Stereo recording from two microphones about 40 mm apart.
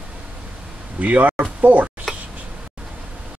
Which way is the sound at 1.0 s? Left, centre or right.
Right.